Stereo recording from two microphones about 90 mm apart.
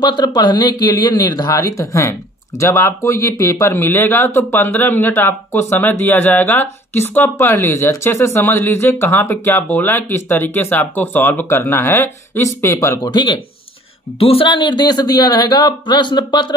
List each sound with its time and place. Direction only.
0.0 s speech: 50° left (ahead or behind); by 13.0 s 30° left (ahead or behind)
13.0 s speech: 55° left (ahead or behind)
14.2 s speech: 85° left; by 16.5 s 55° left (ahead or behind)